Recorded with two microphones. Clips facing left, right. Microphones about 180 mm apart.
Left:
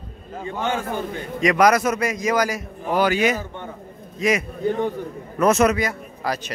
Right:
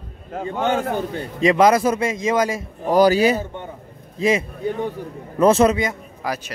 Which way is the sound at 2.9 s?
35° right (ahead or behind).